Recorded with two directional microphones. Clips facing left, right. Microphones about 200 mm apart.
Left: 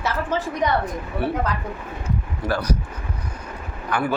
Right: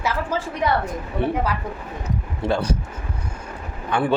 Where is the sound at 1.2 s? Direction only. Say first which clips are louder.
Right 2 dB; 20° right (ahead or behind).